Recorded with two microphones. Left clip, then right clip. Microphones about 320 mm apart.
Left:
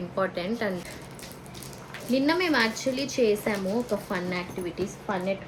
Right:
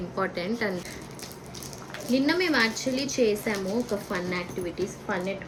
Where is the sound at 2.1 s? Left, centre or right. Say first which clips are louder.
Even; centre.